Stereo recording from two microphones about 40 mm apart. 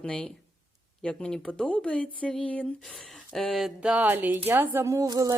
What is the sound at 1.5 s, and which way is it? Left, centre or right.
Speech, left.